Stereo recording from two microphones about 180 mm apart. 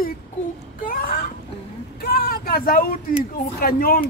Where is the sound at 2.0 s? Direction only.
55° left (ahead or behind).